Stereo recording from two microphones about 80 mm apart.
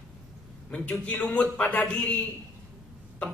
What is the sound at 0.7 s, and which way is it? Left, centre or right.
A man's voice, centre.